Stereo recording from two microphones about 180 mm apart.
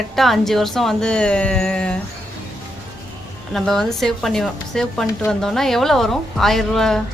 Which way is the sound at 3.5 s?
Centre (ahead or behind).